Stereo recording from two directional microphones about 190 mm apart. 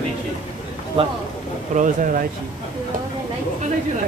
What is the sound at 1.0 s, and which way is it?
Speech, 25° right (ahead or behind).